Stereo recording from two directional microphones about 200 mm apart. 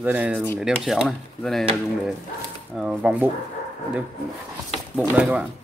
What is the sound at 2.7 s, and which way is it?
Speech, 5° right (ahead or behind).